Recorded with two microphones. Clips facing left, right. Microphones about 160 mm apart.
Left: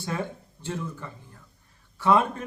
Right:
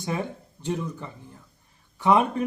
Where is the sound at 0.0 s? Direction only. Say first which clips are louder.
Right 2 dB; 15° right (ahead or behind).